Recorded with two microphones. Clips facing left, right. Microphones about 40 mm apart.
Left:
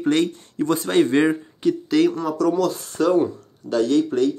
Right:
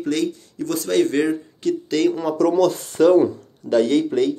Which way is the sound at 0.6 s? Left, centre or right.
Left.